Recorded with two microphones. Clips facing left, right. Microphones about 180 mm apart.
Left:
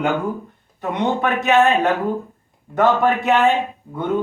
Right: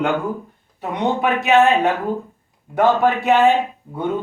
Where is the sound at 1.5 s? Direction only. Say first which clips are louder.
Right 1 dB; centre (ahead or behind).